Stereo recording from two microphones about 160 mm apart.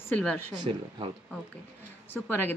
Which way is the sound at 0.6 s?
30° right (ahead or behind).